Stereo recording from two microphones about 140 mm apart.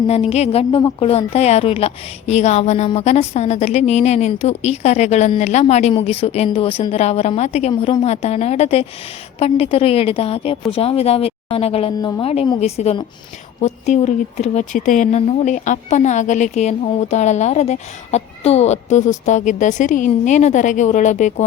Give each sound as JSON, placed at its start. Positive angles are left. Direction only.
{"t": 0.1, "sound": "a woman's voice", "side_deg": 50}
{"t": 0.8, "sound": "a woman's voice", "side_deg": 30}
{"t": 1.0, "sound": "a woman's voice", "side_deg": 50}